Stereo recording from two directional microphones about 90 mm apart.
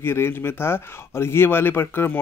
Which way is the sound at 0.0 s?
25° left (ahead or behind).